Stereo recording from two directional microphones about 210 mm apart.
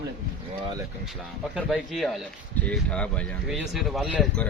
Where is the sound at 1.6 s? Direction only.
Centre (ahead or behind).